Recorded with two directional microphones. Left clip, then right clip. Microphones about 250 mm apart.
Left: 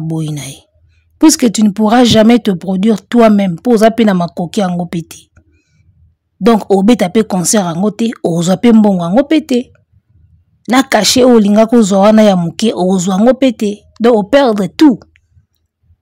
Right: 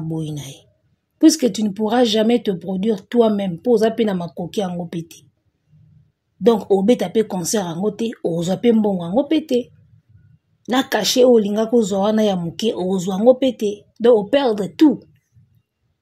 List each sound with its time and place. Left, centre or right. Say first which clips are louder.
0.1 s speech: left 7 dB; left
6.4 s speech: left 5 dB; left